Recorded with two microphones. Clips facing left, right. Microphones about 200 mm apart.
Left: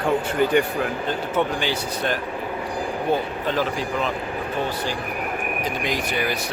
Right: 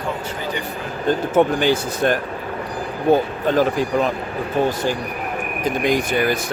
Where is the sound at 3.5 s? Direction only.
45° right (ahead or behind).